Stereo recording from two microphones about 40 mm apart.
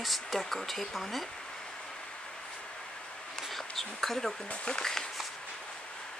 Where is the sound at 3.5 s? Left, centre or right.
Centre.